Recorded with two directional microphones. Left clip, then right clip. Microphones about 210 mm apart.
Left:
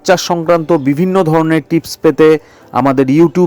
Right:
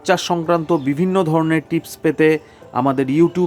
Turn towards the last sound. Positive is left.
turn(degrees=25)  # may be behind; listen again after turning